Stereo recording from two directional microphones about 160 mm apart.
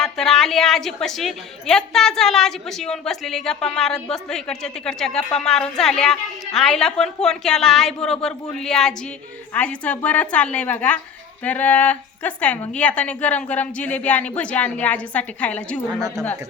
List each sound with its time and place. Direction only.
0.0 s a woman's voice: centre (ahead or behind)
16.0 s speech: 25° right (ahead or behind)